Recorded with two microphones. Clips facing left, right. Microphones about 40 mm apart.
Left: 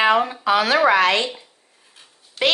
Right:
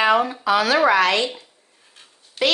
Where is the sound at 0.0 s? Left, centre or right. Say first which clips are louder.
Even; left.